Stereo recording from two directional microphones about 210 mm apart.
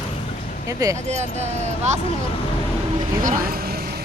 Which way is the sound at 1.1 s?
30° right (ahead or behind).